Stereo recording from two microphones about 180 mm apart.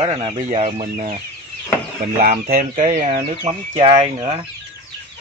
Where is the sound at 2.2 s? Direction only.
55° right (ahead or behind); by 4.4 s 35° right (ahead or behind).